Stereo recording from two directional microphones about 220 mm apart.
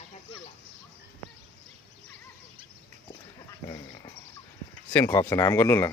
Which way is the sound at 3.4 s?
15° left (ahead or behind).